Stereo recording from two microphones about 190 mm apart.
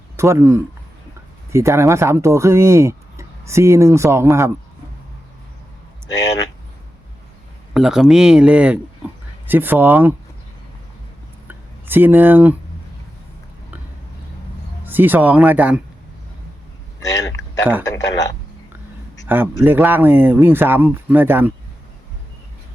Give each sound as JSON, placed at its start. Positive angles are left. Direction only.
{"t": 0.2, "sound": "speech", "side_deg": -15}
{"t": 7.7, "sound": "speech", "side_deg": 0}
{"t": 11.4, "sound": "a sound", "side_deg": -10}
{"t": 14.8, "sound": "speech", "side_deg": -10}
{"t": 17.0, "sound": "a sound", "side_deg": 20}
{"t": 17.6, "sound": "speech", "side_deg": -10}
{"t": 17.9, "sound": "speech", "side_deg": 20}
{"t": 19.3, "sound": "speech", "side_deg": -10}